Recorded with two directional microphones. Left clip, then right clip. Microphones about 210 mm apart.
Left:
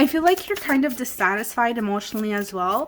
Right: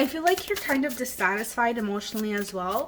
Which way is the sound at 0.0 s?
45° left (ahead or behind).